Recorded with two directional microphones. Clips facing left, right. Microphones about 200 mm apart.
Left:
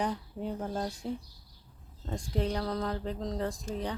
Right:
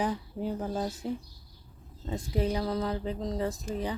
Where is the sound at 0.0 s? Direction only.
5° right (ahead or behind).